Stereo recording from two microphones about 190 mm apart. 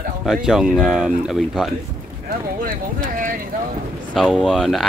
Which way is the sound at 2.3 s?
45° right (ahead or behind).